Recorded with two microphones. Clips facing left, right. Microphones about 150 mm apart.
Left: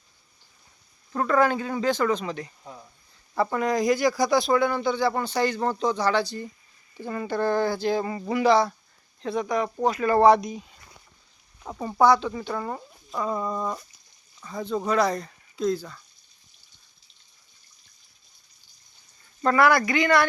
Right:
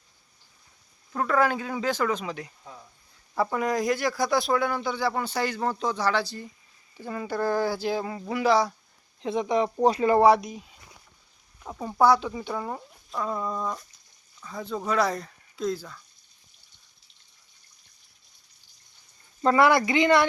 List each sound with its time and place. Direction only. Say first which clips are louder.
1.1 s speech: left 2 dB; centre (ahead or behind)
9.2 s speech: right 1 dB; 20° right (ahead or behind)
10.1 s speech: left 4 dB; 10° right (ahead or behind)
19.4 s speech: even; 20° right (ahead or behind)